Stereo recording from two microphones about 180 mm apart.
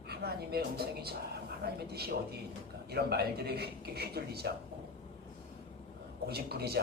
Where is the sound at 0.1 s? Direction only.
60° right (ahead or behind).